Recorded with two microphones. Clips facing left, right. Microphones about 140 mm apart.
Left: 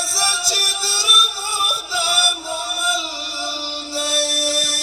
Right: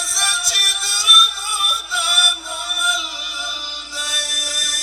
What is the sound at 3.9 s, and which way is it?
Music, 35° left (ahead or behind).